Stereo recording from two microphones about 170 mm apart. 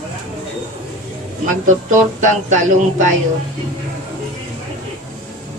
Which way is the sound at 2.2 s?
45° right (ahead or behind).